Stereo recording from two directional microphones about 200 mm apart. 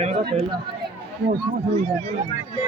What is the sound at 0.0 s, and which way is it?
Chatter, 35° right (ahead or behind).